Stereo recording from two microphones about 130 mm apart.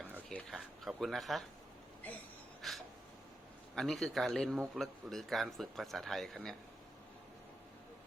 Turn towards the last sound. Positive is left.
turn(degrees=5)  # may be behind; listen again after turning